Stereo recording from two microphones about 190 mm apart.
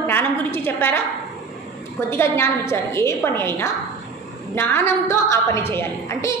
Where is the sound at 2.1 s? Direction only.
15° left (ahead or behind).